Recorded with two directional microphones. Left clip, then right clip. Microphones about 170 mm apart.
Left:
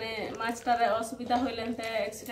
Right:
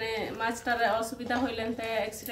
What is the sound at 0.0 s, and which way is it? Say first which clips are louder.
A woman's voice: right 2 dB; centre (ahead or behind).